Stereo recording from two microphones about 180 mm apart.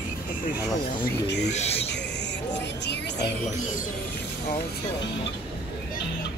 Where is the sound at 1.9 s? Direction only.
75° left (ahead or behind).